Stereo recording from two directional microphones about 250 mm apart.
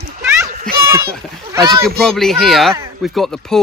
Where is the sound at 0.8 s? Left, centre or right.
Centre.